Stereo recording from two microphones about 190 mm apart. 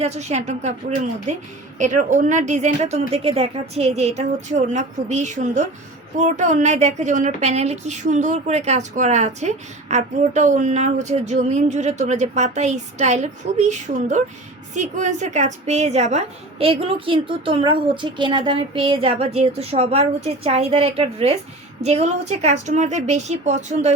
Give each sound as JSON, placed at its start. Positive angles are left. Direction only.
{"t": 0.0, "sound": "a woman's voice", "side_deg": -35}